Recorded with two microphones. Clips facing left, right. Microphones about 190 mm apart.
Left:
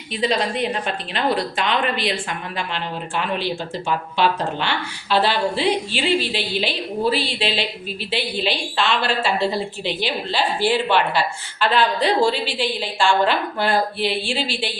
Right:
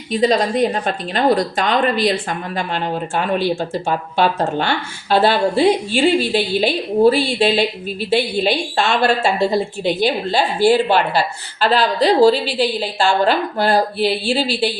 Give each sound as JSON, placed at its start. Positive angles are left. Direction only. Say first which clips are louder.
{"t": 0.1, "sound": "a woman's voice", "louder": "right 6 dB", "side_deg": -40}